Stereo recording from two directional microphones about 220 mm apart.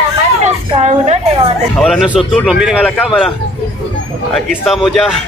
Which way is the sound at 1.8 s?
Centre (ahead or behind).